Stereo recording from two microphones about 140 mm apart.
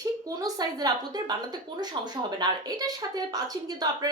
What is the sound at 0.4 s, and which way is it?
Speech, 25° right (ahead or behind).